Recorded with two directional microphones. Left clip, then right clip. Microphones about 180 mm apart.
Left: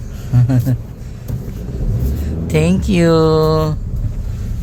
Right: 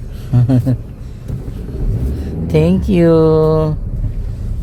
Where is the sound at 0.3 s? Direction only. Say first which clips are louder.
Right 3 dB; 25° right (ahead or behind).